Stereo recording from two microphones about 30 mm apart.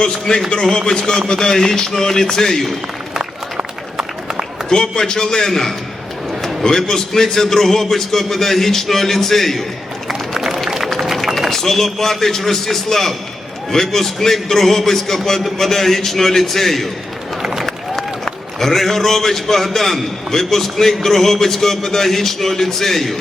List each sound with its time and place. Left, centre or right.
0.0 s a man's voice: left
4.7 s speech: left
5.5 s a man's voice: centre
10.1 s run: centre
10.8 s run: centre
11.5 s a man's voice: centre
18.6 s a man's voice: centre